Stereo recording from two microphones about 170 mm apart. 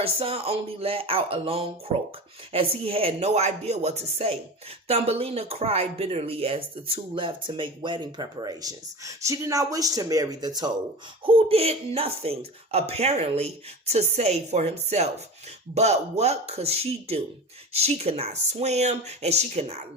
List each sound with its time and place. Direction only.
0.0 s speech: 35° right (ahead or behind)
11.3 s speech: 35° right (ahead or behind)